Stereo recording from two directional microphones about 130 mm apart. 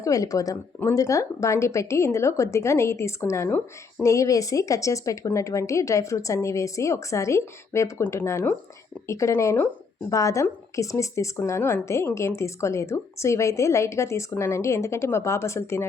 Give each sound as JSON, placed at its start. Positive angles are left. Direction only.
{"t": 0.0, "sound": "a woman's voice", "side_deg": 25}